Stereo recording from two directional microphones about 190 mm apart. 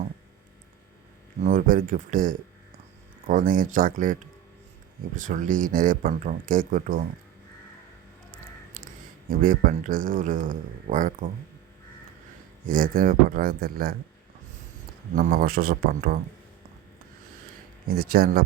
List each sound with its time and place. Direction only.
1.5 s speech: 45° right (ahead or behind)
9.3 s speech: 50° right (ahead or behind)
12.6 s speech: 50° right (ahead or behind)
15.1 s speech: 50° right (ahead or behind)
17.8 s speech: 50° right (ahead or behind)